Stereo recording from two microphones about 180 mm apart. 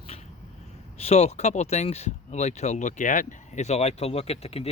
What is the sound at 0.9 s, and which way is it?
Speech, 35° left (ahead or behind).